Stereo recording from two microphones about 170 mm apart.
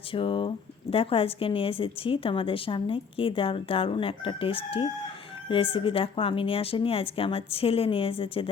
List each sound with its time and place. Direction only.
0.1 s speech: 30° left (ahead or behind)